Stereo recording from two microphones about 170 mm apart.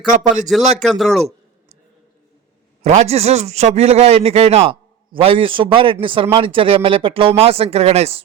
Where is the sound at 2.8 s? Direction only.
45° right (ahead or behind).